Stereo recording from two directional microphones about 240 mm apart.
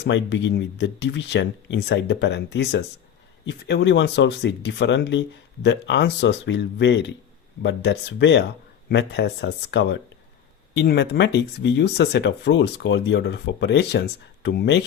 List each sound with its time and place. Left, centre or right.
0.0 s speech: left